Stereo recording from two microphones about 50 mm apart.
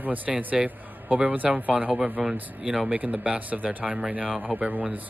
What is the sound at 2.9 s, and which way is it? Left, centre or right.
Speech, right.